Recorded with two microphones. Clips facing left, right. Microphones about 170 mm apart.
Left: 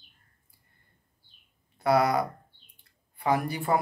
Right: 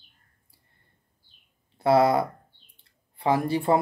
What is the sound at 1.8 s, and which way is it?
Speech, 25° right (ahead or behind).